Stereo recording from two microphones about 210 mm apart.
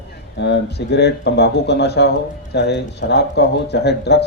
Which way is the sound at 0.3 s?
55° left (ahead or behind).